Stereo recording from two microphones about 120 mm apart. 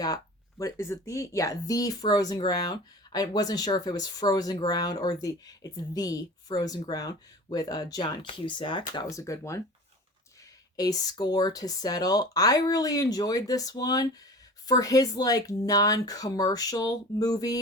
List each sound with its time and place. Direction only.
0.6 s speech: 25° left (ahead or behind)
10.8 s speech: 30° left (ahead or behind)